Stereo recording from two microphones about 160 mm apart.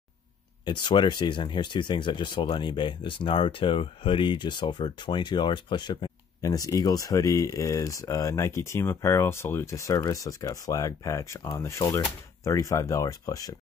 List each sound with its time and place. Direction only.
0.7 s speech: 30° left (ahead or behind)